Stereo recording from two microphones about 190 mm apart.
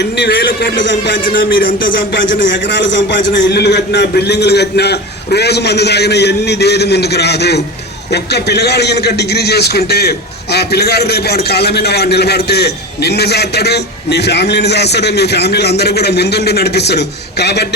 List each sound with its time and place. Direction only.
0.0 s a man's voice: 65° left (ahead or behind)
1.2 s a man's voice: 50° left (ahead or behind)
2.0 s a man's voice: 75° left (ahead or behind)